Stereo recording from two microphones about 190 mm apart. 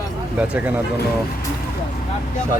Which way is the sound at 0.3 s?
5° right (ahead or behind).